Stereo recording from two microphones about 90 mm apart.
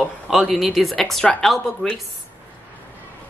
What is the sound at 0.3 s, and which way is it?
Speech, centre (ahead or behind).